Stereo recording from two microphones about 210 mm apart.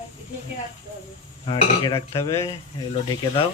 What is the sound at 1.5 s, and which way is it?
Speech, 25° left (ahead or behind).